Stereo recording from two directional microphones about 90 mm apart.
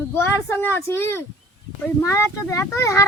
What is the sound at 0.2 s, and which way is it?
A child's voice, 25° left (ahead or behind).